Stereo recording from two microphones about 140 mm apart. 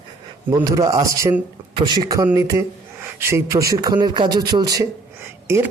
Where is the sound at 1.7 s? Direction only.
35° right (ahead or behind).